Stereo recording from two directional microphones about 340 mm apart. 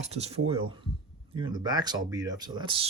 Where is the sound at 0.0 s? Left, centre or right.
Centre.